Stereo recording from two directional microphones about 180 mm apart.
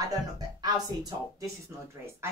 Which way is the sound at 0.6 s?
20° right (ahead or behind).